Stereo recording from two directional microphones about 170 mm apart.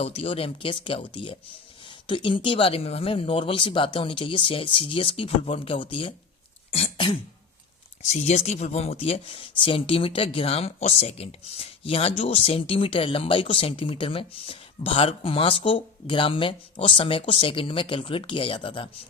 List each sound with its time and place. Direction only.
0.0 s speech: 35° left (ahead or behind)
6.7 s cough: 35° left (ahead or behind)
8.0 s speech: 40° left (ahead or behind)